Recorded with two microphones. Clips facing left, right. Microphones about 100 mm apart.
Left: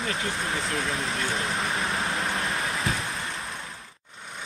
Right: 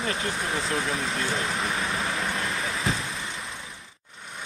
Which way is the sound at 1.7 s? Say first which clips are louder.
Even; 30° left (ahead or behind).